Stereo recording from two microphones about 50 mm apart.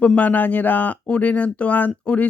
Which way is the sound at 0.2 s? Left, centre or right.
Left.